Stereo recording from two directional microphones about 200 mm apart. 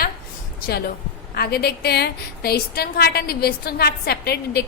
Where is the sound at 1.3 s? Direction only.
50° left (ahead or behind).